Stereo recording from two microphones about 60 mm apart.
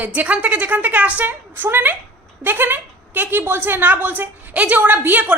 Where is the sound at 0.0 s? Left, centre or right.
Right.